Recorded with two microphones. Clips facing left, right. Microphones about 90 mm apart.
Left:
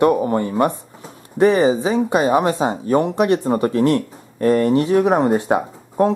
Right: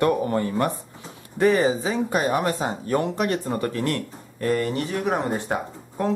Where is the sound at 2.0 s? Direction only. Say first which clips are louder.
Left 6 dB; 20° left (ahead or behind).